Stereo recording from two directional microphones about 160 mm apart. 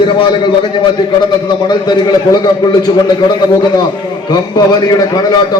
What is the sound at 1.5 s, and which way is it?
A man's voice, 30° left (ahead or behind).